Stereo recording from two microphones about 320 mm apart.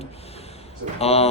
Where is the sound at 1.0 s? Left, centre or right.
Centre.